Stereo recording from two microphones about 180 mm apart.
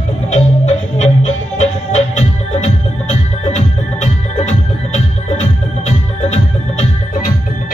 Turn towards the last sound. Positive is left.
turn(degrees=40)  # may be behind; listen again after turning